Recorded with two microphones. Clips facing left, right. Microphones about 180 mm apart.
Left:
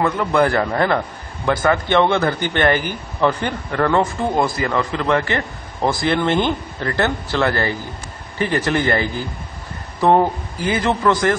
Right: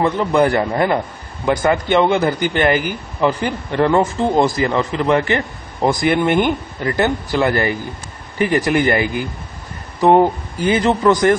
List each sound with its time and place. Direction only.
0.0 s a man's voice: 25° right (ahead or behind); by 3.5 s 10° right (ahead or behind)
3.7 s a man's voice: 20° right (ahead or behind)